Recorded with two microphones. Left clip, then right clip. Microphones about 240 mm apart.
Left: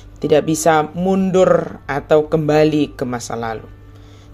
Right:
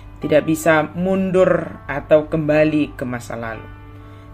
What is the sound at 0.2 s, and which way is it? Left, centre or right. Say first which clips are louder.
Speech: left 2 dB; left.